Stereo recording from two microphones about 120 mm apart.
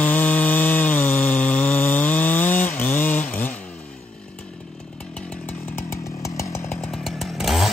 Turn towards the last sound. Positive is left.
turn(degrees=0)  # may be behind; listen again after turning